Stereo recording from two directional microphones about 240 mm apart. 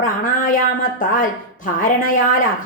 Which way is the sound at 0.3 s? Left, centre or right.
Left.